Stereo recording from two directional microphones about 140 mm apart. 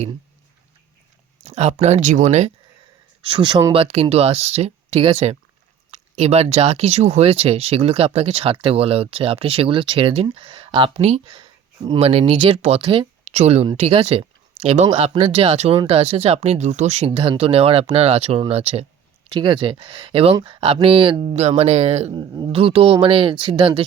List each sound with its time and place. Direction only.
1.5 s speech: 50° right (ahead or behind)
3.2 s speech: 35° right (ahead or behind); by 17.1 s 55° right (ahead or behind)
17.1 s speech: 40° right (ahead or behind)
19.3 s speech: 35° right (ahead or behind)
21.3 s speech: 50° right (ahead or behind)
22.1 s speech: 30° right (ahead or behind)
22.5 s speech: 40° right (ahead or behind)